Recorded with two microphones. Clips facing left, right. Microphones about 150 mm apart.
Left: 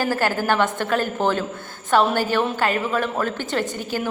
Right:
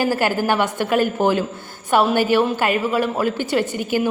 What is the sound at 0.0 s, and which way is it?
A woman's voice, 15° right (ahead or behind).